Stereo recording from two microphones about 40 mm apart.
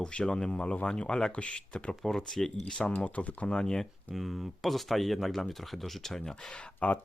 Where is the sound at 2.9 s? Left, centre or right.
Left.